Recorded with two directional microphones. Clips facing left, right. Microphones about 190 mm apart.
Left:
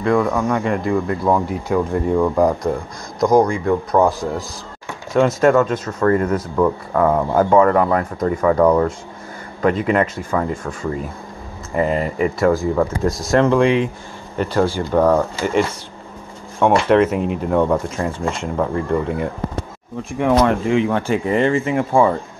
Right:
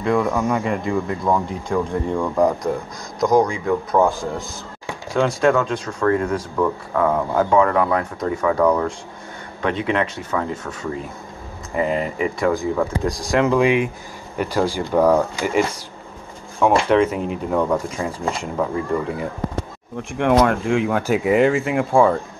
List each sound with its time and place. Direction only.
0.0 s speech: centre (ahead or behind)
12.4 s speech: centre (ahead or behind)
16.6 s speech: 5° left (ahead or behind)